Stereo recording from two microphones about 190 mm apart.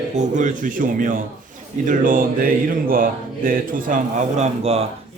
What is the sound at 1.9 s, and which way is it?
Mantra, 45° right (ahead or behind).